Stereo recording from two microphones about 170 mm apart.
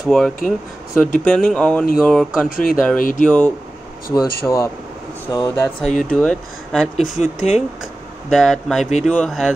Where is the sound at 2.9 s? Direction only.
55° left (ahead or behind).